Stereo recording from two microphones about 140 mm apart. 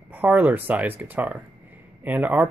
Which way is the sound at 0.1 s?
10° right (ahead or behind).